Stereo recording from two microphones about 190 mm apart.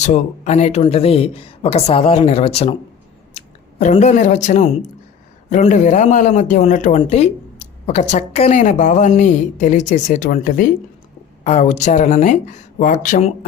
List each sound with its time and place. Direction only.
0.0 s speech: 35° left (ahead or behind)
7.0 s a sound: 35° left (ahead or behind)
8.1 s speech: 35° left (ahead or behind)